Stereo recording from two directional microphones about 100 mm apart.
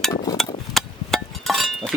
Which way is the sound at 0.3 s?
Centre (ahead or behind).